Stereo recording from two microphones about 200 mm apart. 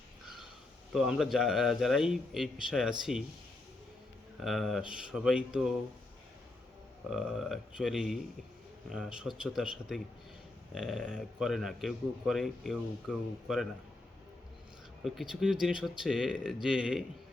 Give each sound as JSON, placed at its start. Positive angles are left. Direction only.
{"t": 0.9, "sound": "a man's voice", "side_deg": 0}
{"t": 4.4, "sound": "a man's voice", "side_deg": 0}
{"t": 7.1, "sound": "a man's voice", "side_deg": 0}
{"t": 15.0, "sound": "a man's voice", "side_deg": 0}